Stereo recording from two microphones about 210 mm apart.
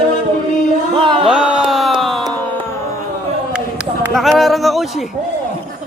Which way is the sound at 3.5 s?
5° right (ahead or behind).